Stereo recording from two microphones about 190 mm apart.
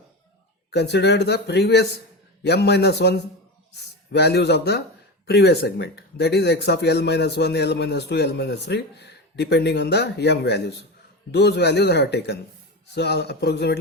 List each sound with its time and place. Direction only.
0.7 s speech: 60° left (ahead or behind)